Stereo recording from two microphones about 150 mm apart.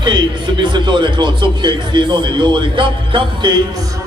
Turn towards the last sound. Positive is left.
turn(degrees=-30)  # may be behind; listen again after turning